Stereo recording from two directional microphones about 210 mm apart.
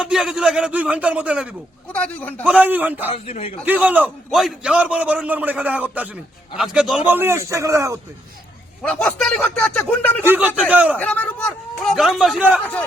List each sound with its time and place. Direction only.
0.0 s a man's voice: 5° right (ahead or behind)
1.9 s a man's voice: 5° left (ahead or behind)
2.4 s a man's voice: 5° right (ahead or behind)
3.1 s a man's voice: 30° left (ahead or behind)
3.7 s a man's voice: 10° right (ahead or behind)
8.8 s a man's voice: 5° left (ahead or behind)
10.2 s a man's voice: 10° right (ahead or behind)
10.9 s a man's voice: 5° left (ahead or behind)